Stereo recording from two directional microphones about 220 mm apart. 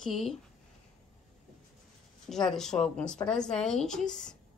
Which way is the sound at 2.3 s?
Centre (ahead or behind).